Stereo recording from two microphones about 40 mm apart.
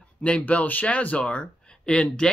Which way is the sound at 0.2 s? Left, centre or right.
Left.